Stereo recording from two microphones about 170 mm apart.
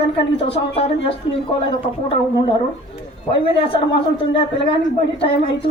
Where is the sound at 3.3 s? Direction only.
30° left (ahead or behind).